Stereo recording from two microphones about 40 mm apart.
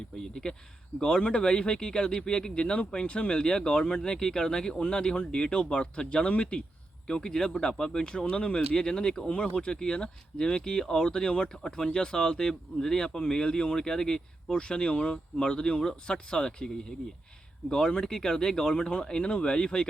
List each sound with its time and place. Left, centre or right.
0.4 s speech: left
7.1 s speech: centre
8.3 s speech: left